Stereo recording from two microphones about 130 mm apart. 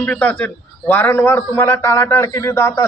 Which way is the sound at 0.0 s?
10° left (ahead or behind).